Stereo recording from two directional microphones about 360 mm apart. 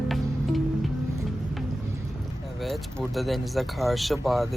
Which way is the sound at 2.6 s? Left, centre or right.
Centre.